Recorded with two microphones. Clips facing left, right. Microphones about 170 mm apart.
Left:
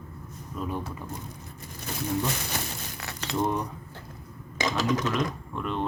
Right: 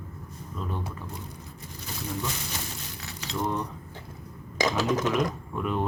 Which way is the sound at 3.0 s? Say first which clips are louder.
Left 3 dB; 65° left (ahead or behind).